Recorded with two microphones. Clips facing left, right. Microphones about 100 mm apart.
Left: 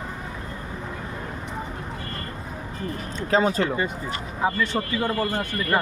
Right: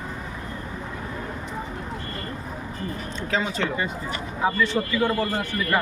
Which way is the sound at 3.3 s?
40° left (ahead or behind).